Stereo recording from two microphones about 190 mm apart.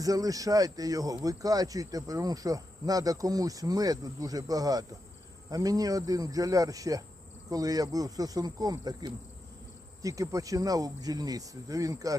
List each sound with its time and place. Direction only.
0.0 s speech: 20° right (ahead or behind)